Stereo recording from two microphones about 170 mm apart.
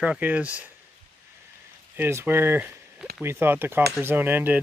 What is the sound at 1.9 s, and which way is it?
Speech, 15° right (ahead or behind).